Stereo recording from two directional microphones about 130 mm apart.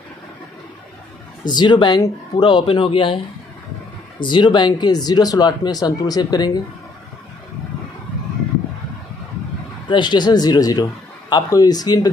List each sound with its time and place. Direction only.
1.4 s speech: 35° left (ahead or behind)
4.2 s speech: 35° left (ahead or behind)
9.8 s speech: 35° left (ahead or behind)